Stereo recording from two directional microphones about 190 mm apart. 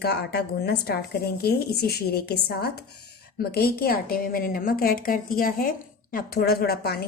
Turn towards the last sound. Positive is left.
turn(degrees=55)  # may be behind; listen again after turning